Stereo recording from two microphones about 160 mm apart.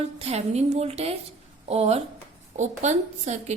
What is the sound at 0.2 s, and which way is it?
A woman's voice, 40° right (ahead or behind).